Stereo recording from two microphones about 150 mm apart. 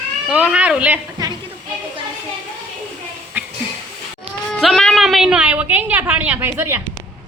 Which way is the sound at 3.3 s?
15° right (ahead or behind).